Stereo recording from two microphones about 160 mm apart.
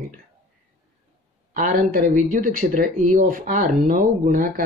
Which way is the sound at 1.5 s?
60° right (ahead or behind).